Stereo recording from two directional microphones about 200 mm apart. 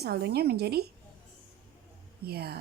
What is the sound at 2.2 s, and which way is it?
Speech, 50° right (ahead or behind).